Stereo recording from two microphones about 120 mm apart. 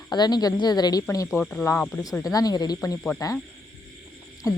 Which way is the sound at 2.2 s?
30° left (ahead or behind).